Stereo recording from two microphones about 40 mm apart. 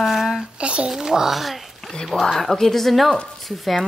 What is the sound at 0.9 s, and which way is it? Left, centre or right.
Speech, centre.